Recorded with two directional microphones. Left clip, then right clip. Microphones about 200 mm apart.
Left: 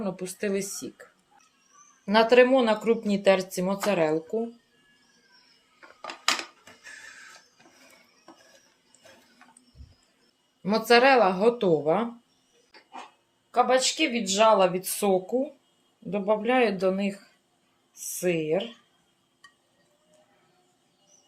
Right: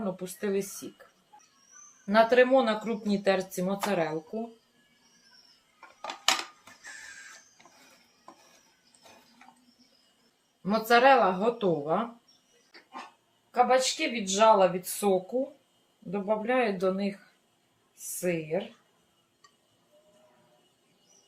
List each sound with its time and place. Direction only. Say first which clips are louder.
0.0 s speech: left 2 dB; 40° left (ahead or behind)
2.0 s speech: left 3 dB; 40° left (ahead or behind)
10.6 s speech: left 2 dB; 40° left (ahead or behind)
13.5 s speech: left 1 dB; 40° left (ahead or behind)
18.2 s speech: left 4 dB; 50° left (ahead or behind)